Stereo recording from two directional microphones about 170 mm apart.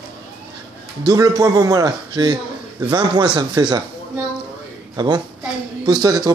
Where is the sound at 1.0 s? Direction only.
20° right (ahead or behind).